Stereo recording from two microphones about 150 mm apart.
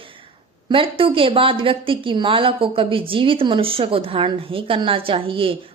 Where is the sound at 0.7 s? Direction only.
35° right (ahead or behind).